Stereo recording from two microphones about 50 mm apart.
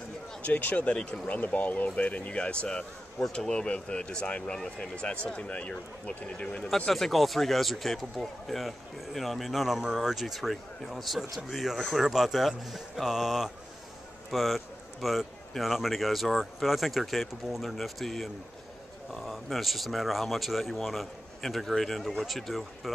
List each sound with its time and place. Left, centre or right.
0.4 s speech: left
6.9 s speech: centre